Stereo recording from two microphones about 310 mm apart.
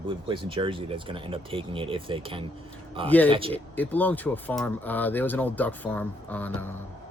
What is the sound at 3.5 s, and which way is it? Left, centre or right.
Speech, centre.